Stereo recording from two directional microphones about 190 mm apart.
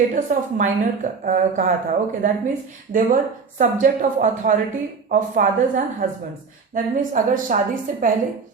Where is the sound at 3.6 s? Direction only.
40° right (ahead or behind).